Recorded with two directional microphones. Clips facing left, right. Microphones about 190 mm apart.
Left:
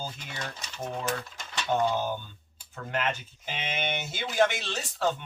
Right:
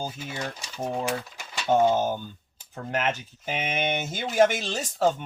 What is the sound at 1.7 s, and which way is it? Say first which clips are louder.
Speech: right 6 dB; 45° right (ahead or behind).